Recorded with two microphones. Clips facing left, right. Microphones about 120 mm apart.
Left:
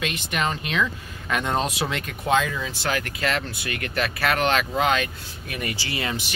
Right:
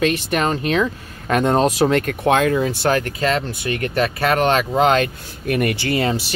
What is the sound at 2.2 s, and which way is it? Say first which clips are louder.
Speech: right 5 dB; 60° right (ahead or behind).